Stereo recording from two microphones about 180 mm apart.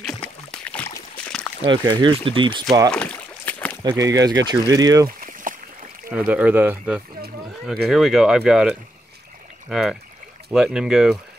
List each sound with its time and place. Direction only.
0.1 s a sound: 5° left (ahead or behind)
1.7 s speech: 25° right (ahead or behind)
2.9 s boat: 5° left (ahead or behind)
3.9 s speech: 20° right (ahead or behind)
5.0 s boat: 50° right (ahead or behind)
6.0 s speech: 10° right (ahead or behind)